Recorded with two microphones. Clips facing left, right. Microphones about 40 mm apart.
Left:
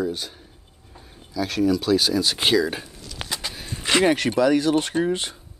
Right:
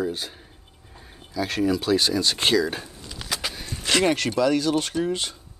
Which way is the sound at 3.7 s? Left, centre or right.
Left.